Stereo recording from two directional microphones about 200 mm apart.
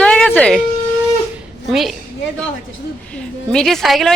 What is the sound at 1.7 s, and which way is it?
Speech, centre (ahead or behind).